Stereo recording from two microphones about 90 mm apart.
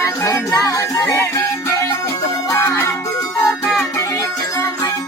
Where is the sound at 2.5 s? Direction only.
40° left (ahead or behind).